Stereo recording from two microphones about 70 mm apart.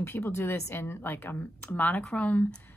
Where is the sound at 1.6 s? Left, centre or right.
Left.